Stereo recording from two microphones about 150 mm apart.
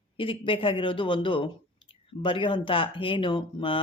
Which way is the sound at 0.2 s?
35° left (ahead or behind).